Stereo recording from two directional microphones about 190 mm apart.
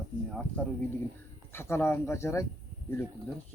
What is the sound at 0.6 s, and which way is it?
Speech, 5° left (ahead or behind).